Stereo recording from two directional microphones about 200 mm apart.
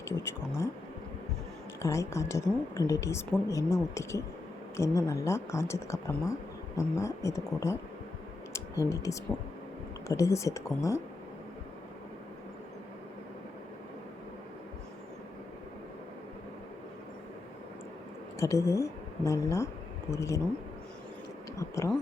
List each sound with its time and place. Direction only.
0.0 s speech: 15° left (ahead or behind)
1.8 s speech: 15° left (ahead or behind)
8.5 s clicking: 15° left (ahead or behind)
10.1 s speech: 15° left (ahead or behind)
18.3 s speech: 15° left (ahead or behind)
21.5 s speech: 15° left (ahead or behind)